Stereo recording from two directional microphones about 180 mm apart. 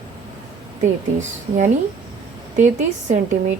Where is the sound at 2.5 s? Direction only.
40° right (ahead or behind).